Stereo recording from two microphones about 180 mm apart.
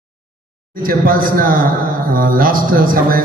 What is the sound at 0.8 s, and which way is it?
A man's voice, 50° right (ahead or behind).